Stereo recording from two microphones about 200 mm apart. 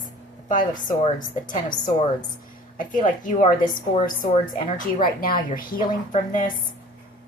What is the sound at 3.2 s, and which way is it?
Speech, 35° left (ahead or behind).